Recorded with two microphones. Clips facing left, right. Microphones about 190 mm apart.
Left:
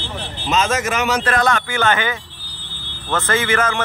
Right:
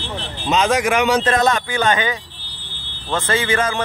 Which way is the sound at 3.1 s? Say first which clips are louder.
Even; 30° right (ahead or behind).